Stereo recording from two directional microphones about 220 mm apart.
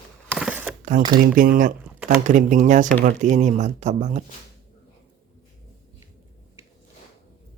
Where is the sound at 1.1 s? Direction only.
40° right (ahead or behind).